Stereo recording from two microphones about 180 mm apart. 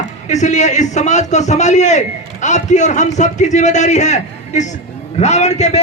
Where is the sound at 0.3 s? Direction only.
40° left (ahead or behind).